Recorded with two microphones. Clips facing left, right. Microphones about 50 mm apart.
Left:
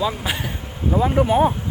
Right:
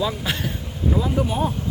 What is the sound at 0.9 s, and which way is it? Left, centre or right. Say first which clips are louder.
Speech: left 5 dB; left.